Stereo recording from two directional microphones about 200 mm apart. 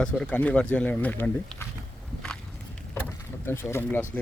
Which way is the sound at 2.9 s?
10° left (ahead or behind).